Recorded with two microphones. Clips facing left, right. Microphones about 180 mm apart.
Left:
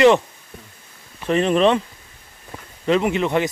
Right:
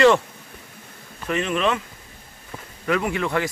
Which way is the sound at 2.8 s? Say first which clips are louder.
Left 5 dB; 20° left (ahead or behind).